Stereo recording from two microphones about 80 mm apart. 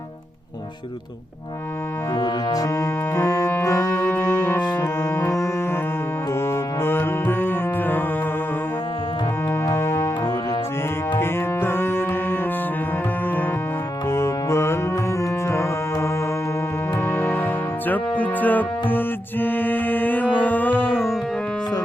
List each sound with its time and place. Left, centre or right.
2.1 s music: left
6.4 s music: left
9.7 s music: left
11.2 s music: left
14.1 s music: left
17.1 s music: left